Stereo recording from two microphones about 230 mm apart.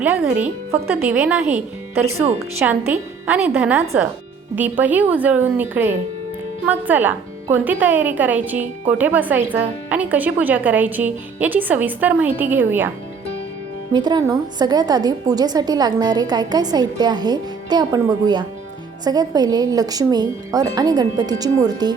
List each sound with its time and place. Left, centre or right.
0.0 s a woman's voice: centre
13.9 s a woman's voice: centre